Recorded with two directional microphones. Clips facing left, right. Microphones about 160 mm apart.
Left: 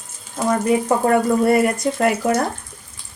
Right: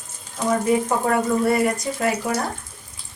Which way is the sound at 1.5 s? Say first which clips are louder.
Left 4 dB; 60° left (ahead or behind).